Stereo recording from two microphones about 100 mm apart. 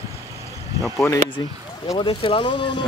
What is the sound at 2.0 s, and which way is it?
Speech, 60° left (ahead or behind).